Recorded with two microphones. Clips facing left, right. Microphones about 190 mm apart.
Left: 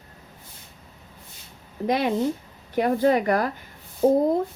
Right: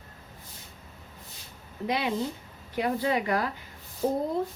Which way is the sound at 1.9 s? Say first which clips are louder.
Left 6 dB; 45° left (ahead or behind).